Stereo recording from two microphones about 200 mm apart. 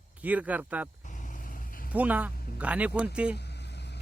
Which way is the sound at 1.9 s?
10° right (ahead or behind).